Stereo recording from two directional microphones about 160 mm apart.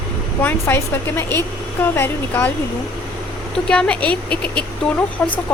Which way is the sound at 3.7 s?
5° left (ahead or behind).